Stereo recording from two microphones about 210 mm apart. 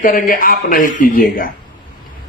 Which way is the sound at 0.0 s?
40° left (ahead or behind).